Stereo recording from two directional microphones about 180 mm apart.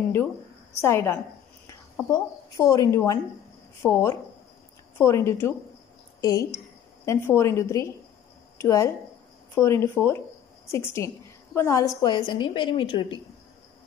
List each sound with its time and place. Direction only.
0.7 s a woman's voice: 15° left (ahead or behind)